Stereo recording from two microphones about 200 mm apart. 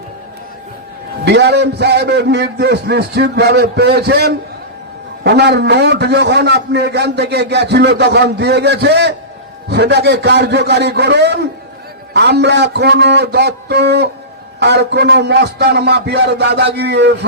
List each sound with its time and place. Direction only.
1.2 s a man's voice: 55° right (ahead or behind)